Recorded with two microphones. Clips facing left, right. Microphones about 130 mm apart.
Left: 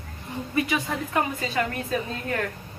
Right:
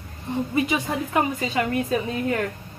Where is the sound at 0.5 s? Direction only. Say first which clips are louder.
Even; 20° right (ahead or behind).